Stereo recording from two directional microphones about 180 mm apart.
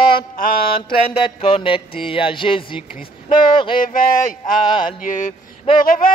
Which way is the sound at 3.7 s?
50° left (ahead or behind).